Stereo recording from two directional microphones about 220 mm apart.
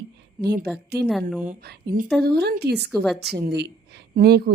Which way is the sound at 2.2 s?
45° right (ahead or behind).